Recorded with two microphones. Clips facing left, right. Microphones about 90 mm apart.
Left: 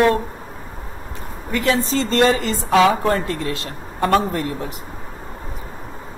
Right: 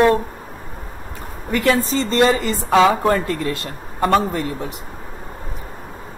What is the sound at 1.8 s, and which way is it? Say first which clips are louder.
Speech: even; centre (ahead or behind).